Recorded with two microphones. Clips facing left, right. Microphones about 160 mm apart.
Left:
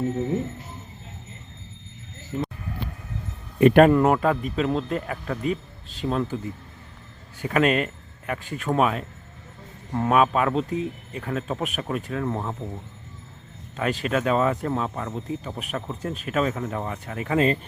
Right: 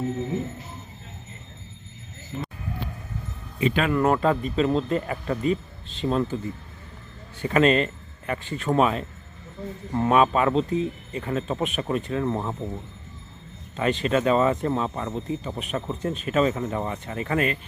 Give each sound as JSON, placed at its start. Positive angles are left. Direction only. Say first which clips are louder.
{"t": 3.6, "sound": "speech", "louder": "left 10 dB", "side_deg": 60}
{"t": 3.9, "sound": "speech", "louder": "left 1 dB", "side_deg": 15}
{"t": 7.4, "sound": "speech", "louder": "right 2 dB", "side_deg": 5}
{"t": 13.7, "sound": "speech", "louder": "right 2 dB", "side_deg": 5}
{"t": 17.3, "sound": "speech", "louder": "left 4 dB", "side_deg": 30}